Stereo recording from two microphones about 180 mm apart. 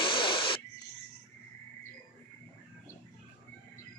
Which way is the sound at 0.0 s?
25° left (ahead or behind).